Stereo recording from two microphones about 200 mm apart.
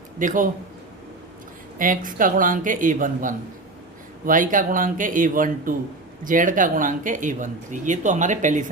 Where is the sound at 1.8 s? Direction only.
40° right (ahead or behind).